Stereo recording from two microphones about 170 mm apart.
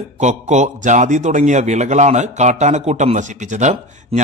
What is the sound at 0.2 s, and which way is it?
A man's voice, 45° right (ahead or behind).